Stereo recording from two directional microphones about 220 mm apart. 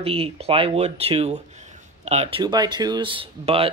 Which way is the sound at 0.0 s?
25° right (ahead or behind).